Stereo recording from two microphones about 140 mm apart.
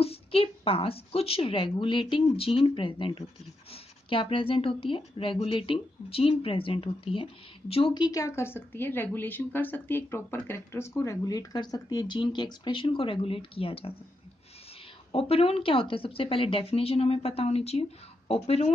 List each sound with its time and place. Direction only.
0.0 s speech: 45° left (ahead or behind)
15.1 s a woman's voice: 45° left (ahead or behind)